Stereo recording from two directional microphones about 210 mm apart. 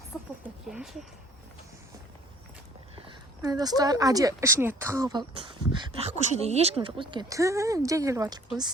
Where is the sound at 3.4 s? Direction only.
20° right (ahead or behind).